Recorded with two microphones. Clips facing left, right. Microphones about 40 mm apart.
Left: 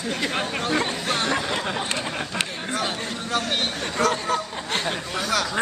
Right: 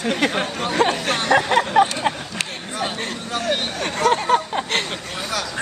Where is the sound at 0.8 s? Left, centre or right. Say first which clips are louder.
Right 5 dB; right.